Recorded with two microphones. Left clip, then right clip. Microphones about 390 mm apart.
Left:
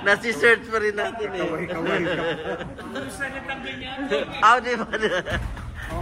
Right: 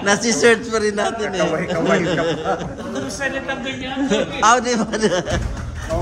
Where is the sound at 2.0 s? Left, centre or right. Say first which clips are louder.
Right 5 dB; centre.